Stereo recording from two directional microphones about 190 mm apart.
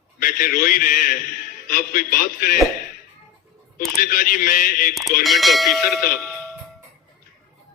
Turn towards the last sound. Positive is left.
turn(degrees=0)  # may be behind; listen again after turning